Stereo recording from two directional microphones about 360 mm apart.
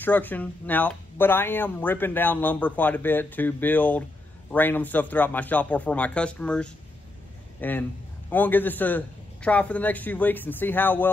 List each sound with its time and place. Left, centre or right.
0.0 s speech: centre